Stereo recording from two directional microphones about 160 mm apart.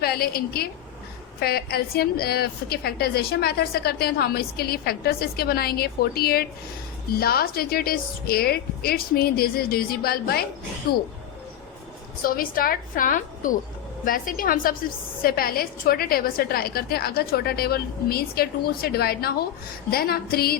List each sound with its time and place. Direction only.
0.0 s a woman's voice: 75° left (ahead or behind)
12.2 s a woman's voice: 65° left (ahead or behind)